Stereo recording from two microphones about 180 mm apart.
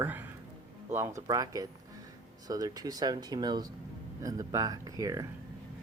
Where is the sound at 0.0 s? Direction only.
10° right (ahead or behind).